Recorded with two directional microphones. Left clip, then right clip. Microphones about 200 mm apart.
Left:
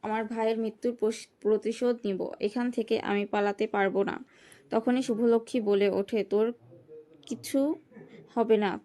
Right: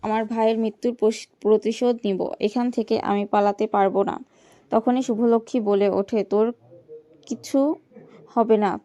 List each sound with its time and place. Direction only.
0.0 s a woman's voice: 45° right (ahead or behind); by 8.8 s 15° right (ahead or behind)